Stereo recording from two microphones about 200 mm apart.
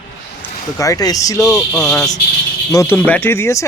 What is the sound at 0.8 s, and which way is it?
Speech, 15° left (ahead or behind).